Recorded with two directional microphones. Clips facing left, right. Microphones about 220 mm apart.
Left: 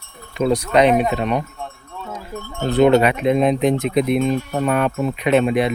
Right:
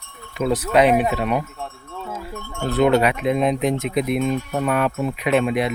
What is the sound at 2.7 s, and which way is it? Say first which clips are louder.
Speech: left 3 dB; centre (ahead or behind).